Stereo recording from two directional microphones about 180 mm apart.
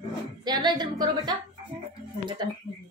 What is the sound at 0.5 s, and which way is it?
Speech, 25° right (ahead or behind).